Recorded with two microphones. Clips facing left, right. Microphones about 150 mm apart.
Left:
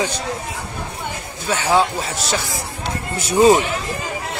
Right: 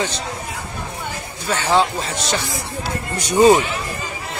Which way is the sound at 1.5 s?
10° left (ahead or behind).